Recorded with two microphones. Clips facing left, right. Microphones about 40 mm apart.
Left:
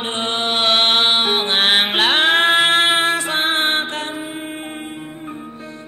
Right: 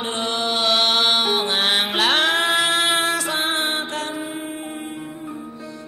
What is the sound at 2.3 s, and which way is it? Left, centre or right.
Music, left.